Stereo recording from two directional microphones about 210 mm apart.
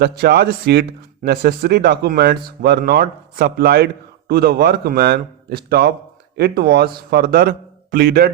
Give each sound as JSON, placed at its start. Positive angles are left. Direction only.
{"t": 0.0, "sound": "speech", "side_deg": -50}